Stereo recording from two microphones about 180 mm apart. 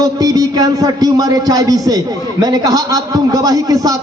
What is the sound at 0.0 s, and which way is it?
A man's voice, 20° right (ahead or behind).